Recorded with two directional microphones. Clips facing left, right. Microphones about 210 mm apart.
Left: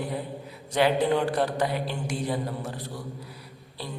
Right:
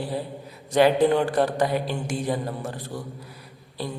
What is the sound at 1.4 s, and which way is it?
Speech, 45° right (ahead or behind).